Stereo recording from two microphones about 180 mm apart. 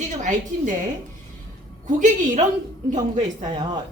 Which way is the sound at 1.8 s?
45° right (ahead or behind).